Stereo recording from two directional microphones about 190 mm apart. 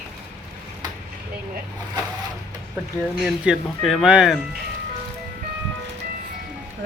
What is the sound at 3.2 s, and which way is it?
Speech, centre (ahead or behind).